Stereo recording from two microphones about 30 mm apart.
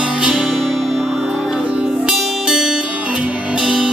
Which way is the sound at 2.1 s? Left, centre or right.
Right.